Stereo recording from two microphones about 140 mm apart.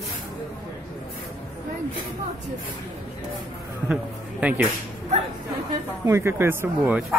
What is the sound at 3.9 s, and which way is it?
Speech, 10° right (ahead or behind).